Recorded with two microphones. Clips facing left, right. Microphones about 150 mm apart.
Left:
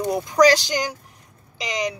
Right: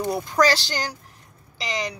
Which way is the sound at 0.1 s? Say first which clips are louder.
Left 5 dB; 15° left (ahead or behind).